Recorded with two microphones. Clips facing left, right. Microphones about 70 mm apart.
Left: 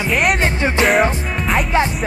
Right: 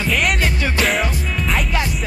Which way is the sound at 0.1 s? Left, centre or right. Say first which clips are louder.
Left 3 dB; centre.